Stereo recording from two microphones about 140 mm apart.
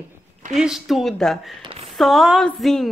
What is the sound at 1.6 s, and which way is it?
Speech, 40° right (ahead or behind).